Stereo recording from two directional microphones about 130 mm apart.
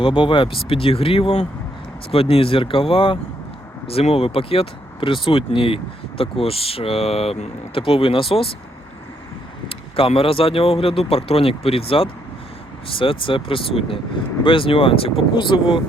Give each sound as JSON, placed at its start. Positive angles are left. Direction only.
{"t": 0.0, "sound": "speech", "side_deg": 40}
{"t": 9.6, "sound": "speech", "side_deg": 45}